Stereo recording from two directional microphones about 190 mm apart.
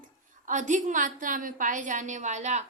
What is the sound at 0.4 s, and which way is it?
A woman's voice, 40° right (ahead or behind).